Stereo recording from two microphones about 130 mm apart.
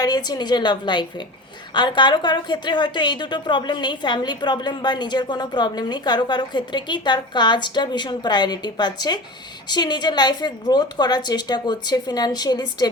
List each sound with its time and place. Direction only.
0.0 s a woman's voice: 30° left (ahead or behind)